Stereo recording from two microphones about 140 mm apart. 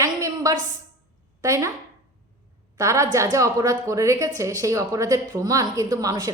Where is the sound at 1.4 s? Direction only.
20° right (ahead or behind).